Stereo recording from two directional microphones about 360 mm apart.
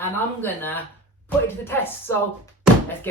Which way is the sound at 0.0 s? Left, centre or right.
Centre.